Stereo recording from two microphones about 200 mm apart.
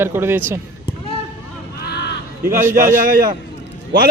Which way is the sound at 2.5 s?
15° right (ahead or behind).